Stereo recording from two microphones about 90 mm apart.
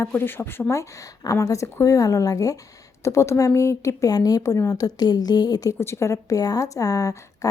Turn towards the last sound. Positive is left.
turn(degrees=40)  # may be behind; listen again after turning